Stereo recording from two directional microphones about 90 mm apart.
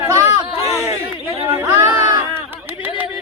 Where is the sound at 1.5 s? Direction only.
35° right (ahead or behind).